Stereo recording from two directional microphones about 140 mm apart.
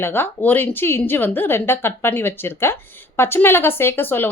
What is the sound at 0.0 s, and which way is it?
A woman's voice, 15° left (ahead or behind).